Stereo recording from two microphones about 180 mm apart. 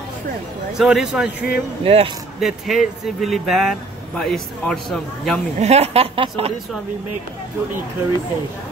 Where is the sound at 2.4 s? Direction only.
Centre (ahead or behind).